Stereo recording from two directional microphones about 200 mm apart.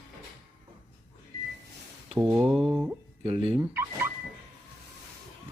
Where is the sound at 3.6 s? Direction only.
10° right (ahead or behind).